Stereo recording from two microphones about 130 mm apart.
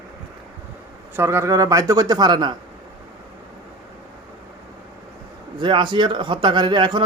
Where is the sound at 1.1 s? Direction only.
20° right (ahead or behind).